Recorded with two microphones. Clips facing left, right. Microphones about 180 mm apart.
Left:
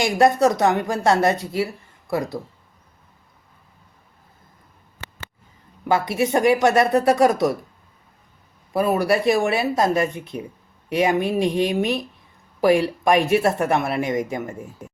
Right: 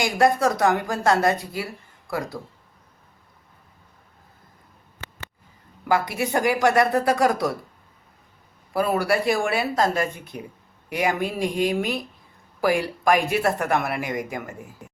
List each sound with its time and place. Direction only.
0.0 s speech: 20° left (ahead or behind)
5.9 s speech: 25° left (ahead or behind)
8.7 s speech: 20° left (ahead or behind)